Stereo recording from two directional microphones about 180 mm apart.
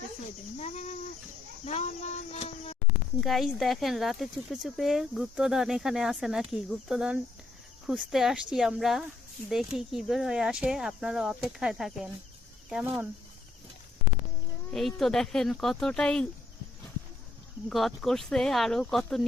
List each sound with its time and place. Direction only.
0.6 s a sound: 40° left (ahead or behind)
3.2 s speech: centre (ahead or behind)
14.7 s speech: centre (ahead or behind)
17.7 s speech: centre (ahead or behind)